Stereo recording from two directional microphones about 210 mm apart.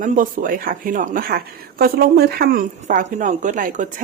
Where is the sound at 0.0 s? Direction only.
40° right (ahead or behind).